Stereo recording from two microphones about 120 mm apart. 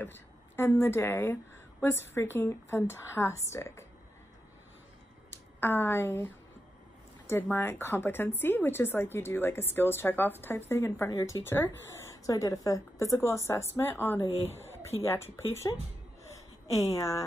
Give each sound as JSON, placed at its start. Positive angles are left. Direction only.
{"t": 0.0, "sound": "a woman's voice", "side_deg": 20}
{"t": 5.6, "sound": "a woman's voice", "side_deg": 20}
{"t": 14.5, "sound": "a sound", "side_deg": 20}
{"t": 15.0, "sound": "a woman's voice", "side_deg": 20}
{"t": 16.9, "sound": "a woman's voice", "side_deg": 25}